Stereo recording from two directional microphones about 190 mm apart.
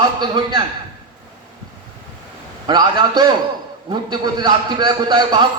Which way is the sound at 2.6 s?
20° right (ahead or behind).